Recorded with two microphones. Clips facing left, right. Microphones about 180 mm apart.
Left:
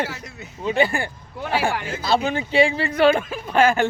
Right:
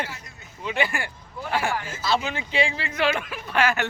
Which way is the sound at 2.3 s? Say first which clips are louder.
Left 7 dB; 35° left (ahead or behind).